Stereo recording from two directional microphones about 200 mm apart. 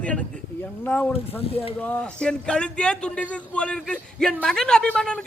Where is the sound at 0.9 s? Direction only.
10° left (ahead or behind).